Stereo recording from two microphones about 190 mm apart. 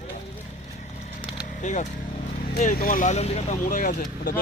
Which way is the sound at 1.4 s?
40° left (ahead or behind).